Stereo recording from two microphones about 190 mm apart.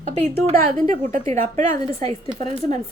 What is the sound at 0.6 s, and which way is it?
Speech, 45° right (ahead or behind).